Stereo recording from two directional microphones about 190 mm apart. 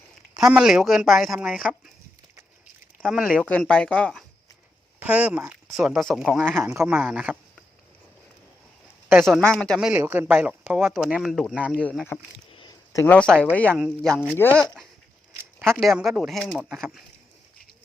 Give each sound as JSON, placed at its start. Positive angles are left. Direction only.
{"t": 0.3, "sound": "speech", "side_deg": -5}
{"t": 3.0, "sound": "speech", "side_deg": -5}
{"t": 4.9, "sound": "speech", "side_deg": -5}
{"t": 6.6, "sound": "a man's voice", "side_deg": -15}
{"t": 9.2, "sound": "speech", "side_deg": 5}
{"t": 11.8, "sound": "speech", "side_deg": 5}
{"t": 12.5, "sound": "a sound", "side_deg": 25}
{"t": 12.9, "sound": "speech", "side_deg": 15}
{"t": 13.7, "sound": "speech", "side_deg": -5}
{"t": 15.5, "sound": "a sound", "side_deg": -10}
{"t": 15.8, "sound": "speech", "side_deg": 0}